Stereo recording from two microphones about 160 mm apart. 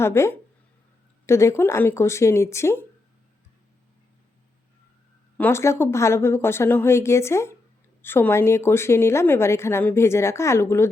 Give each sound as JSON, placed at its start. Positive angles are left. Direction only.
{"t": 0.0, "sound": "a woman's voice", "side_deg": 15}
{"t": 5.4, "sound": "a woman's voice", "side_deg": 15}